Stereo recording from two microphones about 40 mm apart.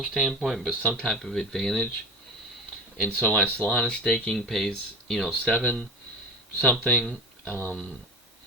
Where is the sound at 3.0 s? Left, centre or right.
Left.